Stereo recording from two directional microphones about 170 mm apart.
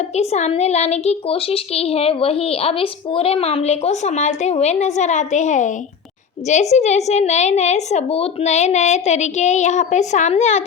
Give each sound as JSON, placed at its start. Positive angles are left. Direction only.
{"t": 0.2, "sound": "a child's voice", "side_deg": 40}